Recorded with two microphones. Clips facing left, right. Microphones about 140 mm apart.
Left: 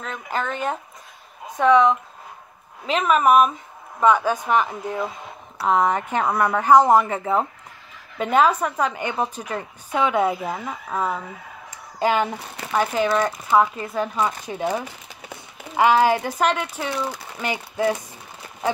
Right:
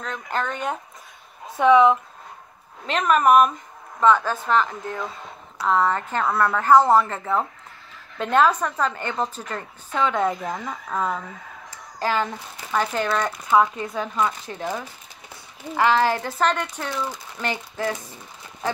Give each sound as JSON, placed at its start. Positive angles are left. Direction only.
{"t": 0.0, "sound": "speech", "side_deg": 5}
{"t": 2.9, "sound": "speech", "side_deg": 5}